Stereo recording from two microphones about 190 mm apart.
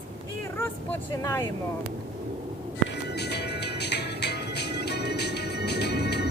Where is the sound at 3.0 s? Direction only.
60° left (ahead or behind).